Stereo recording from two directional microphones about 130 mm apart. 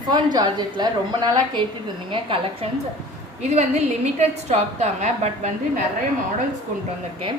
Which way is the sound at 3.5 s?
55° right (ahead or behind).